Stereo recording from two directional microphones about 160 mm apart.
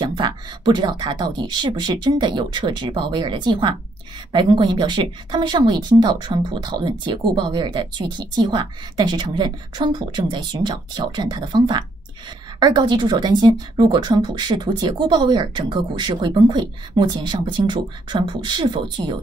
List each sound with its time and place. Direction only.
0.0 s a woman's voice: 30° right (ahead or behind)